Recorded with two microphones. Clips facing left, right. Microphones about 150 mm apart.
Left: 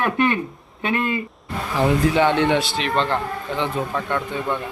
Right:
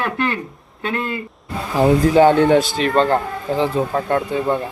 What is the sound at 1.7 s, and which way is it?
Speech, 40° right (ahead or behind).